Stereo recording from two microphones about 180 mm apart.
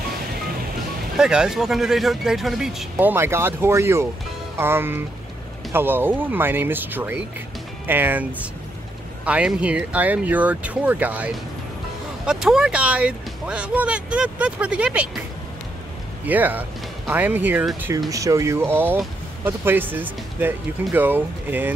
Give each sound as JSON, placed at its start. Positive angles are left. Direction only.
{"t": 1.1, "sound": "speech", "side_deg": -5}
{"t": 16.3, "sound": "speech", "side_deg": -10}